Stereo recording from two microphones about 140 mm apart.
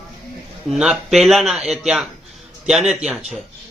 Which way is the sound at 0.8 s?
5° right (ahead or behind).